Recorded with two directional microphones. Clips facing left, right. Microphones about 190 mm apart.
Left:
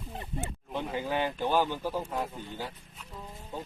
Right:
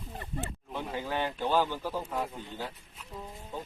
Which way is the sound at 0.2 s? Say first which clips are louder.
Even; 20° left (ahead or behind).